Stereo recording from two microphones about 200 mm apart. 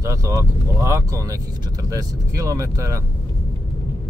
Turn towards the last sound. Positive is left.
turn(degrees=-15)  # may be behind; listen again after turning